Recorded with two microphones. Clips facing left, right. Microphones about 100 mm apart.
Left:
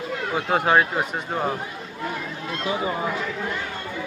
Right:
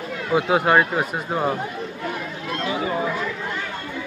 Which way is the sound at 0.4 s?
5° right (ahead or behind).